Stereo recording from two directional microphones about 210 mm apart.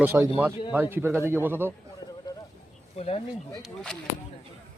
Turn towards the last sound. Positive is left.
turn(degrees=5)  # may be behind; listen again after turning